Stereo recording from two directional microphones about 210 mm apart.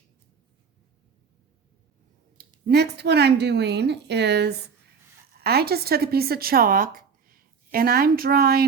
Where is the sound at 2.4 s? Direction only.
50° right (ahead or behind).